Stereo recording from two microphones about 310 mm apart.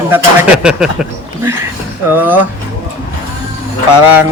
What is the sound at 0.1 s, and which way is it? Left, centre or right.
Speech, centre.